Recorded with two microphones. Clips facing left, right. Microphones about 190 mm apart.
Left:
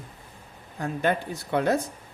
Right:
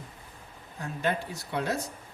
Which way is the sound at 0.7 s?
55° left (ahead or behind).